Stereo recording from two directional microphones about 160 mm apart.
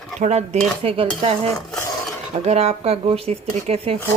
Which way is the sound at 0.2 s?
45° right (ahead or behind).